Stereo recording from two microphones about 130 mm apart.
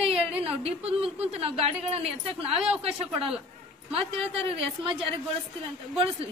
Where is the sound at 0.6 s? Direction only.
50° right (ahead or behind).